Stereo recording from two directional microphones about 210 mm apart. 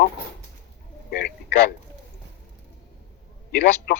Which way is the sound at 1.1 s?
50° left (ahead or behind).